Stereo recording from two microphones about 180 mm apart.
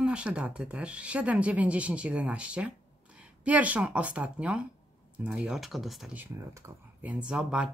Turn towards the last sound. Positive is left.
turn(degrees=-5)  # may be behind; listen again after turning